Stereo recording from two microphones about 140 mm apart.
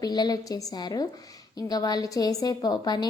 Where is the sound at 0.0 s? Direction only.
30° left (ahead or behind).